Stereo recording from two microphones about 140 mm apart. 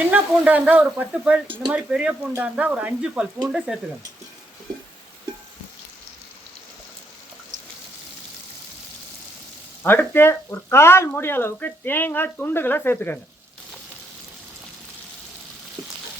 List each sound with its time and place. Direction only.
0.0 s speech: 10° right (ahead or behind)
9.8 s speech: 15° left (ahead or behind)